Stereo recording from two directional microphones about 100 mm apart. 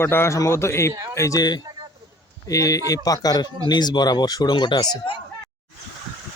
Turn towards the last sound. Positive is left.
turn(degrees=50)  # may be behind; listen again after turning